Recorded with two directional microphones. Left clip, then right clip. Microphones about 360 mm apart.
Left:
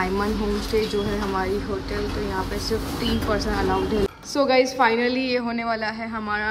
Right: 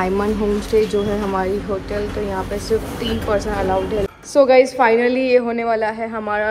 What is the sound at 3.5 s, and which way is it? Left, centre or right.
A woman's voice, centre.